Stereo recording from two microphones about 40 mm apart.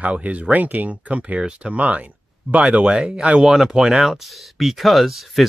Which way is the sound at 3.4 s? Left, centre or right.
Centre.